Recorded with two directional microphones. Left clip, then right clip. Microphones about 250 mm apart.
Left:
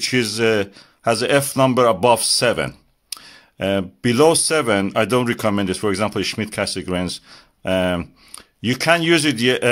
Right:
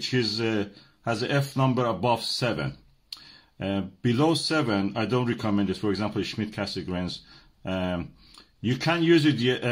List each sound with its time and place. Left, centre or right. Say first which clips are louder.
0.0 s speech: left 8 dB; left